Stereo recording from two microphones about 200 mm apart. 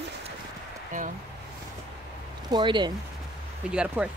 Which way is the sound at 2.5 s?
20° right (ahead or behind).